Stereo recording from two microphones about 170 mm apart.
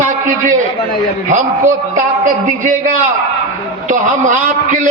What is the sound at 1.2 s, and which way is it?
A man's voice, 45° right (ahead or behind).